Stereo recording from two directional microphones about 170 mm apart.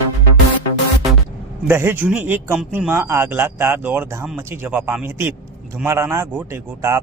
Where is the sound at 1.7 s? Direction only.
15° right (ahead or behind).